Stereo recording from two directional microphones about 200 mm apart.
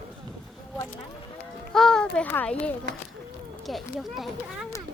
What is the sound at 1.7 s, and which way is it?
A child's voice, 5° left (ahead or behind).